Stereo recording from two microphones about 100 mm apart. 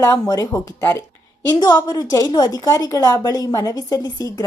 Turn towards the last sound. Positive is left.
turn(degrees=40)  # may be behind; listen again after turning